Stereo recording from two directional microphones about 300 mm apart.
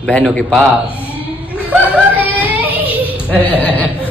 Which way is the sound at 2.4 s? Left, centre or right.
Centre.